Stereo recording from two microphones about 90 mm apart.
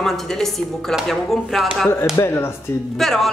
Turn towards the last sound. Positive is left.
turn(degrees=0)  # may be behind; listen again after turning